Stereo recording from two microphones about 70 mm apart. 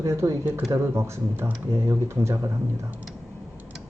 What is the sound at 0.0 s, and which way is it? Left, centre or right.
Speech, right.